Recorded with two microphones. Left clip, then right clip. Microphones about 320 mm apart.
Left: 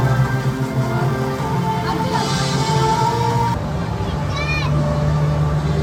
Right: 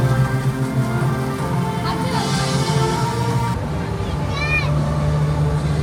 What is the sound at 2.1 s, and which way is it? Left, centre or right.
Music, centre.